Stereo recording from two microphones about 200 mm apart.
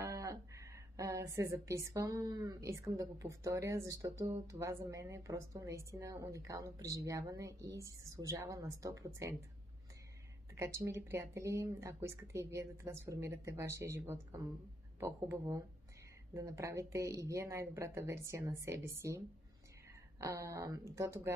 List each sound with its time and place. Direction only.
0.0 s speech: 15° right (ahead or behind)
10.5 s speech: 15° right (ahead or behind)